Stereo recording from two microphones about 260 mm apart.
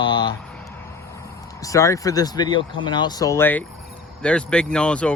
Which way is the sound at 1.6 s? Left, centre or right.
Centre.